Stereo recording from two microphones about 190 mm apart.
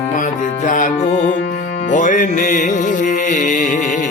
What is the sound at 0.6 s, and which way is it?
Music, 45° left (ahead or behind).